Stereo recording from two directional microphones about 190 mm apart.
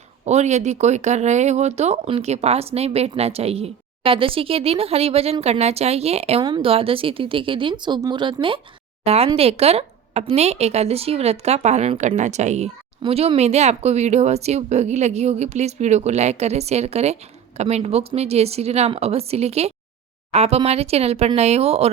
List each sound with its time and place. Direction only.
0.3 s speech: 35° right (ahead or behind)